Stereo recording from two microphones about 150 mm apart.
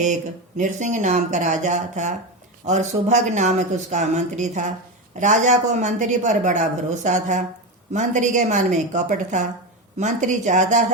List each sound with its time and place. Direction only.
0.0 s a woman's voice: 55° right (ahead or behind)